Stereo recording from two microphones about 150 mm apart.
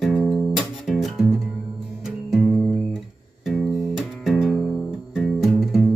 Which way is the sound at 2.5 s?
10° left (ahead or behind).